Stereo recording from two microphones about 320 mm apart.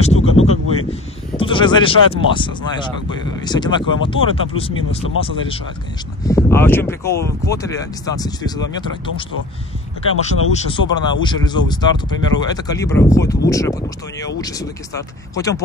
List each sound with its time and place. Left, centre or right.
0.0 s a sound: centre
2.2 s speech: centre
6.2 s speech: centre
10.5 s speech: centre